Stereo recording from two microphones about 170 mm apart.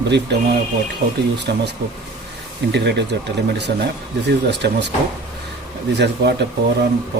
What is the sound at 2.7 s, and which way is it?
Speech, 90° right.